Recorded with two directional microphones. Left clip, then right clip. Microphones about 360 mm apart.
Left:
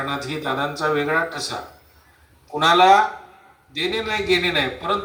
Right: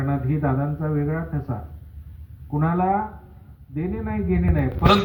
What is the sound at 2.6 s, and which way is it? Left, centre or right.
Speech, left.